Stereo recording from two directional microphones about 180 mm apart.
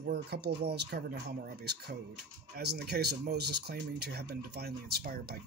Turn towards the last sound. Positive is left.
turn(degrees=-60)  # may be behind; listen again after turning